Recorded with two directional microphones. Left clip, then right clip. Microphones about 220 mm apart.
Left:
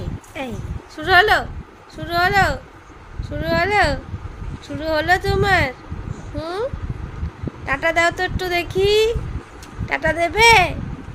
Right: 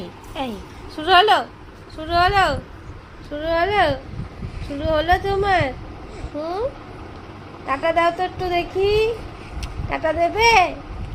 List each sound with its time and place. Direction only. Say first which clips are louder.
0.9 s speech: even; centre (ahead or behind); by 6.7 s 25° left (ahead or behind)
7.7 s speech: left 1 dB; 20° left (ahead or behind)